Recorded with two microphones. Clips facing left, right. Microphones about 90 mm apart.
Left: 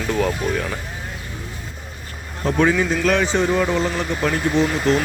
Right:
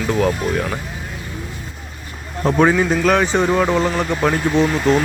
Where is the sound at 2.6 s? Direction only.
50° right (ahead or behind).